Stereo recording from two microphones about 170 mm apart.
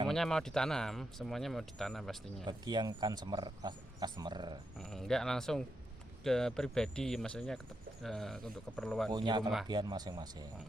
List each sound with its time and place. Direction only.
0.1 s speech: 5° left (ahead or behind)
2.4 s speech: 25° right (ahead or behind)
4.8 s speech: centre (ahead or behind)
9.1 s speech: 25° right (ahead or behind)